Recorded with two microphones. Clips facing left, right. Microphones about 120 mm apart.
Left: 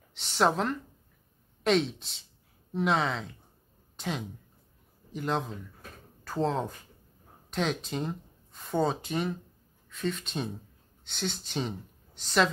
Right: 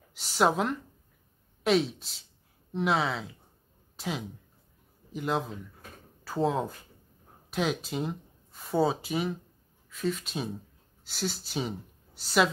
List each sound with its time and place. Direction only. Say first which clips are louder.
0.1 s speech: right 1 dB; 5° right (ahead or behind)
5.1 s a sound: right 1 dB; 5° right (ahead or behind)
7.5 s speech: right 1 dB; 5° right (ahead or behind)